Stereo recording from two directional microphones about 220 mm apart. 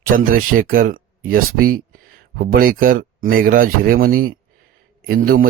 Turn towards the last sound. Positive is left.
turn(degrees=-40)  # may be behind; listen again after turning